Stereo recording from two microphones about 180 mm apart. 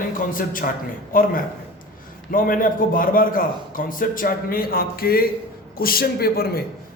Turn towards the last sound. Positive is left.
turn(degrees=60)  # may be behind; listen again after turning